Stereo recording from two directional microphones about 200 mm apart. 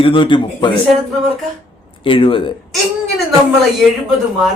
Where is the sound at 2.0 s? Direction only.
25° left (ahead or behind).